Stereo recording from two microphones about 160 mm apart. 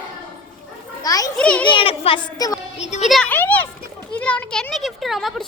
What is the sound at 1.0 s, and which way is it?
Speech, 20° left (ahead or behind).